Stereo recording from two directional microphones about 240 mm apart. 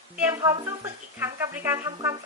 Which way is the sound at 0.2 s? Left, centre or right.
Centre.